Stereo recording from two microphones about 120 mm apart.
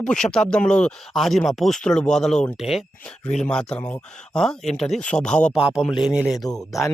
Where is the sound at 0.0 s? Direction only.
5° left (ahead or behind).